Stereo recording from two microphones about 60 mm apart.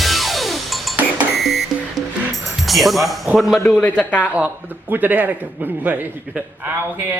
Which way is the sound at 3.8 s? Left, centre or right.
Left.